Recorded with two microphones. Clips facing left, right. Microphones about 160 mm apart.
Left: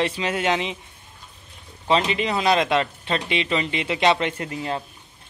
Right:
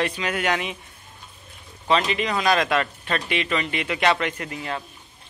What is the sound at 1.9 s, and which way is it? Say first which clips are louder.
Speech: left 1 dB; 30° left (ahead or behind).